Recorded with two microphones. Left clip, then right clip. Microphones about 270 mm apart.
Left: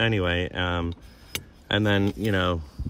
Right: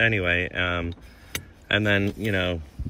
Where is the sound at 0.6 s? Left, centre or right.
Left.